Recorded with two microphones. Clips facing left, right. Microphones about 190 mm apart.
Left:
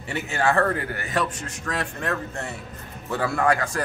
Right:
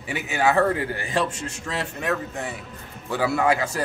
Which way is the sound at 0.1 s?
15° right (ahead or behind).